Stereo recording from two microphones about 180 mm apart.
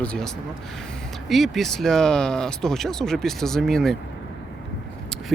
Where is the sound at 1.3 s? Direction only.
Centre (ahead or behind).